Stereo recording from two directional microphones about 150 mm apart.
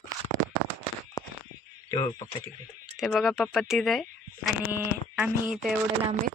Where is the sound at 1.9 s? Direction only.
25° left (ahead or behind).